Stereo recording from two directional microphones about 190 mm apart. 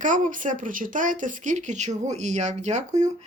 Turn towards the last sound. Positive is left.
turn(degrees=-40)  # may be behind; listen again after turning